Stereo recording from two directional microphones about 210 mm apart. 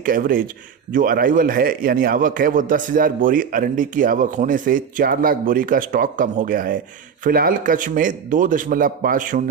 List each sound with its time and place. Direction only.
0.0 s a man's voice: 40° right (ahead or behind)